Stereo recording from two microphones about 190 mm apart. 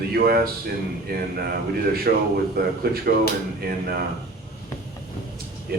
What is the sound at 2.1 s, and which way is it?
A man's voice, 55° right (ahead or behind).